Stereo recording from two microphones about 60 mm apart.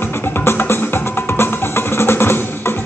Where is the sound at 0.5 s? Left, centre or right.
Left.